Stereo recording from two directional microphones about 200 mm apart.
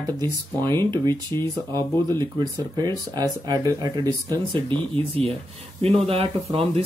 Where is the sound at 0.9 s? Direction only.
20° right (ahead or behind).